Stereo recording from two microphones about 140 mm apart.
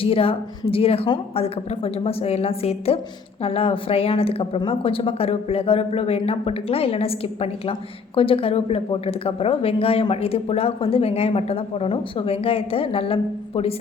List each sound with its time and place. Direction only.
0.0 s a woman's voice: 40° left (ahead or behind)